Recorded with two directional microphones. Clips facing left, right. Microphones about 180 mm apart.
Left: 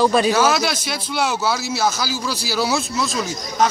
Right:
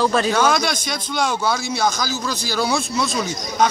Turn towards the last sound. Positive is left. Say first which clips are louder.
# even
turn(degrees=0)  # may be behind; listen again after turning